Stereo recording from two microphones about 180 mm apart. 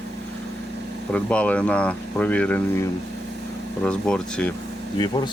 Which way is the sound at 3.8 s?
5° left (ahead or behind).